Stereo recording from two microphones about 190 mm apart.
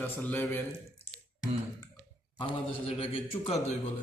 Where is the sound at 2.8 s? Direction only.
30° left (ahead or behind).